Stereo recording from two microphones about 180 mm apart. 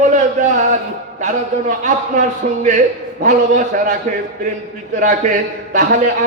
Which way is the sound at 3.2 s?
45° right (ahead or behind).